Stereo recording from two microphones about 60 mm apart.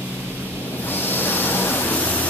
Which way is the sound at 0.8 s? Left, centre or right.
Left.